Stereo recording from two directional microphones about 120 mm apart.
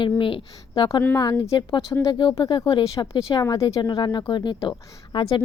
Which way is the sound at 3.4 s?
25° left (ahead or behind).